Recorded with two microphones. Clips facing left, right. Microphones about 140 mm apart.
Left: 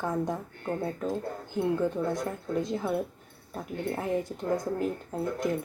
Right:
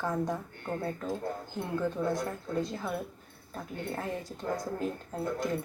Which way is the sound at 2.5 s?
20° left (ahead or behind).